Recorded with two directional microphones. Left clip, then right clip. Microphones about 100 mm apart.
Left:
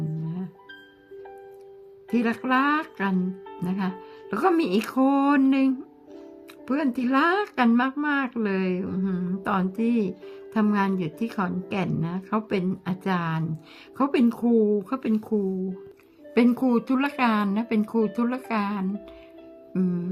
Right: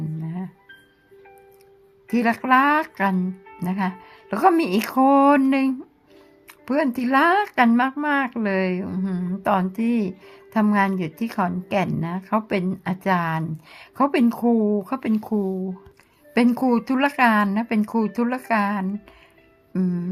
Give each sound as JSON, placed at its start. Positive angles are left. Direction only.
{"t": 2.0, "sound": "a woman's voice", "side_deg": -45}
{"t": 17.4, "sound": "a woman's voice", "side_deg": -30}
{"t": 19.7, "sound": "music", "side_deg": -25}